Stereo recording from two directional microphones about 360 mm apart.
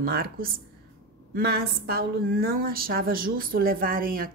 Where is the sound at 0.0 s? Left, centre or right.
Right.